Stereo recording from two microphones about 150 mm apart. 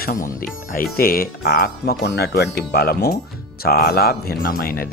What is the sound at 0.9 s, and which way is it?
Speech, 80° left.